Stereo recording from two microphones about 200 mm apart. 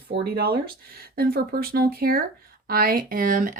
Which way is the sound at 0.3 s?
50° right (ahead or behind).